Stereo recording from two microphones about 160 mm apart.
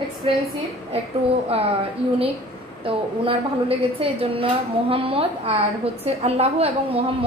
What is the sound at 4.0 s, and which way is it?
A woman's voice, 35° right (ahead or behind).